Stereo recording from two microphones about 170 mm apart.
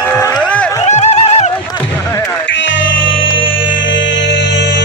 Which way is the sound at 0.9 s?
40° left (ahead or behind).